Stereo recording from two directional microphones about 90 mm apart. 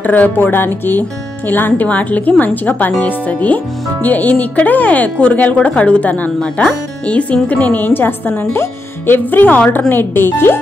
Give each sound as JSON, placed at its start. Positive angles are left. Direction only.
{"t": 0.0, "sound": "a woman's voice", "side_deg": 20}